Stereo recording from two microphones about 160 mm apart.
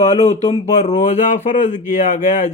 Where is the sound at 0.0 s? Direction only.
45° left (ahead or behind).